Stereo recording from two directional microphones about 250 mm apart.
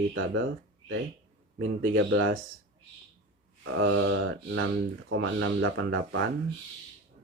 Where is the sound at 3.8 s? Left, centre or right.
Right.